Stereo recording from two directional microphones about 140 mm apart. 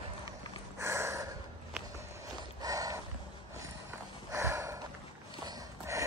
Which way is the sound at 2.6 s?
25° right (ahead or behind).